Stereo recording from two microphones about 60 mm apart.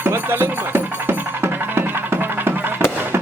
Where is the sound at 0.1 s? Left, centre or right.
Right.